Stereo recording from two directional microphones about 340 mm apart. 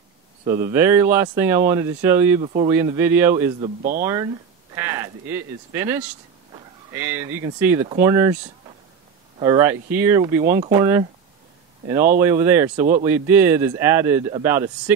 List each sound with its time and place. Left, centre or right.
0.5 s speech: centre
2.4 s speech: centre
9.4 s speech: centre
12.2 s speech: centre